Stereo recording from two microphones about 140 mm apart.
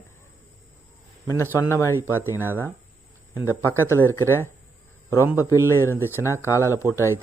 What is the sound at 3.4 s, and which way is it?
Speech, 15° left (ahead or behind).